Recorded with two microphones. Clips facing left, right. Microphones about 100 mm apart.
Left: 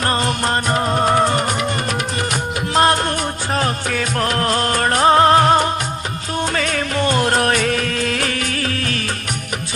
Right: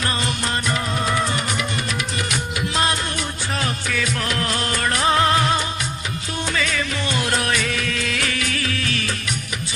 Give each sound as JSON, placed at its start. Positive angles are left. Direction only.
{"t": 0.0, "sound": "music", "side_deg": 45}